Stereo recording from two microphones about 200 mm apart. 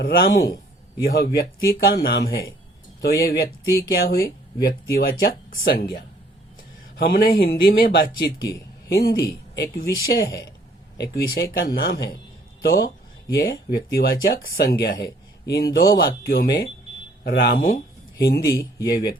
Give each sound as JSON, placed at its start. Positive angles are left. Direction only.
{"t": 0.0, "sound": "speech", "side_deg": 50}
{"t": 18.4, "sound": "speech", "side_deg": 15}